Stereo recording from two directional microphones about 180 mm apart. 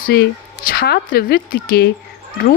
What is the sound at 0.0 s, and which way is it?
A woman's voice, 60° left (ahead or behind).